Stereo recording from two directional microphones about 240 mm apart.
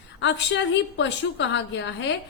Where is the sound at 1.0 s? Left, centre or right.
Left.